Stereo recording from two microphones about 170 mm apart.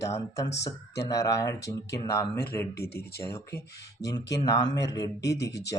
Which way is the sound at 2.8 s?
70° left (ahead or behind).